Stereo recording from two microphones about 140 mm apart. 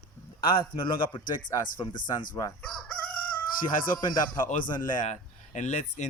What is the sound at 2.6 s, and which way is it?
Chicken, 5° left (ahead or behind).